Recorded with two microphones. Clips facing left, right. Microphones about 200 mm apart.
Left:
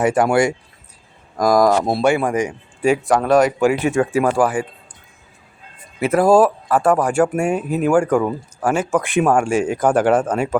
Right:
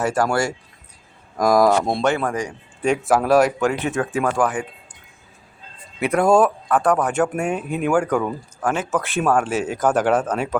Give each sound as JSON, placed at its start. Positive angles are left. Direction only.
{"t": 0.0, "sound": "speech", "side_deg": 15}
{"t": 1.4, "sound": "speech", "side_deg": 0}
{"t": 2.8, "sound": "speech", "side_deg": 0}
{"t": 3.6, "sound": "speech", "side_deg": 10}
{"t": 6.0, "sound": "speech", "side_deg": 5}